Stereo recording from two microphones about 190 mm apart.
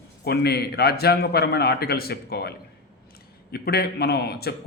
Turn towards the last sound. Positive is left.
turn(degrees=55)  # may be behind; listen again after turning